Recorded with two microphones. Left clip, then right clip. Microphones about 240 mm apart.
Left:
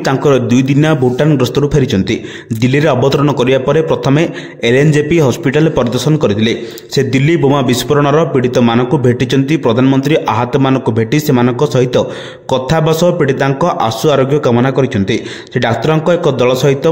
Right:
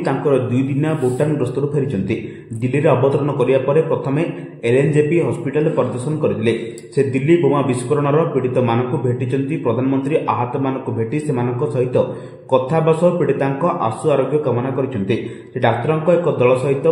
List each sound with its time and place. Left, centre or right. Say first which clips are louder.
0.0 s a man's voice: left 6 dB; left
7.0 s a man's voice: left 3 dB; left